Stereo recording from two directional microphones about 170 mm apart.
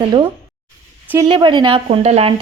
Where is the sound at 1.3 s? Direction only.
25° right (ahead or behind).